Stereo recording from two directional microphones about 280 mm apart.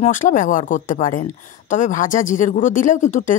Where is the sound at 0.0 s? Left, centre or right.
Left.